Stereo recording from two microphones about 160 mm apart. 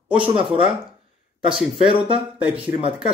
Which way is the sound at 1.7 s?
35° right (ahead or behind).